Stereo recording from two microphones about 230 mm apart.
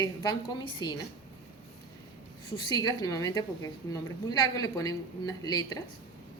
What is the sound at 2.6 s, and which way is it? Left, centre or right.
A woman's voice, centre.